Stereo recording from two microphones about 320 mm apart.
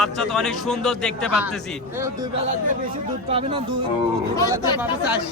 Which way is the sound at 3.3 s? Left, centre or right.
Centre.